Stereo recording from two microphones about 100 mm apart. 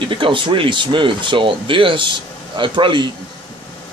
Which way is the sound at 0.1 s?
55° right (ahead or behind).